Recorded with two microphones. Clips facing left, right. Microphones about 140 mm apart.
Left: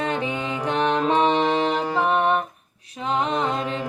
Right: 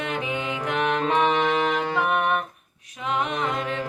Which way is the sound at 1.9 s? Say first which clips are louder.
Left 5 dB; 30° left (ahead or behind).